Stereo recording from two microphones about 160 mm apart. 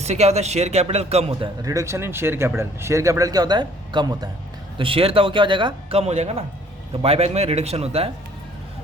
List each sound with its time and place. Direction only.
0.0 s speech: 45° right (ahead or behind)
1.6 s speech: 20° right (ahead or behind); by 8.1 s 40° right (ahead or behind)